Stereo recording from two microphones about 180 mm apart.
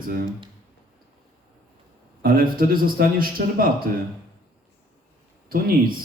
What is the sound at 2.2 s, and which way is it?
A man's voice, 55° right (ahead or behind).